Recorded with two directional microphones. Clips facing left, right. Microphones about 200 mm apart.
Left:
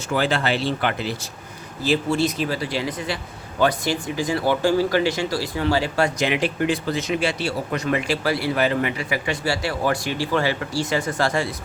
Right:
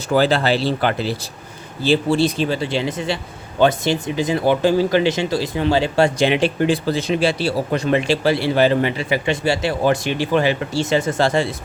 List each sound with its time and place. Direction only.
0.1 s speech: 35° right (ahead or behind)